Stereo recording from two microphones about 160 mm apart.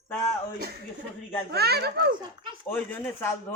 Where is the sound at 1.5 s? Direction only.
85° right.